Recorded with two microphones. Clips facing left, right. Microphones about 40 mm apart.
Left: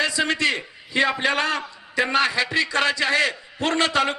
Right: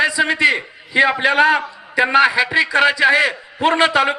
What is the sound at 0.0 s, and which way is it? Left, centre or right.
A man's voice, right.